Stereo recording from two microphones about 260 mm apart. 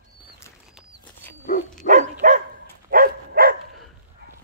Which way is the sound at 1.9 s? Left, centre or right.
Right.